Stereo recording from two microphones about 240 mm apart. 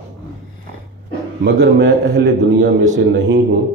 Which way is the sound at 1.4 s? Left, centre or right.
Right.